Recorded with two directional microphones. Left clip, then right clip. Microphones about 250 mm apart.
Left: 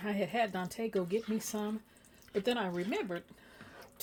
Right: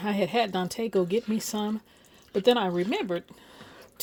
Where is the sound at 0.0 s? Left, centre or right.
Right.